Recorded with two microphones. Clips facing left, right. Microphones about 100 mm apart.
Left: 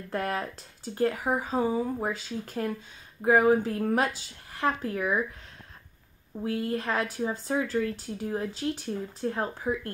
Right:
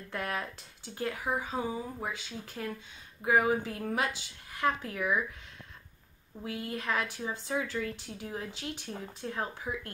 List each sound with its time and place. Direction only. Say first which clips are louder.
0.1 s speech: left 5 dB; 40° left (ahead or behind)
6.4 s speech: left 6 dB; 40° left (ahead or behind)